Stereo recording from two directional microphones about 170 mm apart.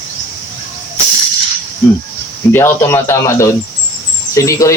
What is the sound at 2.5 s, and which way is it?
Speech, 15° left (ahead or behind).